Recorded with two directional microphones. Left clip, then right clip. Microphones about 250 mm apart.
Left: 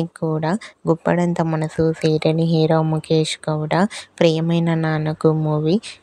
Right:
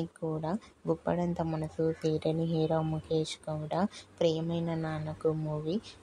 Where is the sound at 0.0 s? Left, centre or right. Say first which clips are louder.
Left 13 dB; left.